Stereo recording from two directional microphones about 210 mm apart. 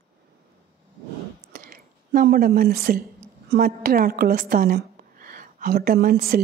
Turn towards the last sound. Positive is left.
turn(degrees=-45)  # may be behind; listen again after turning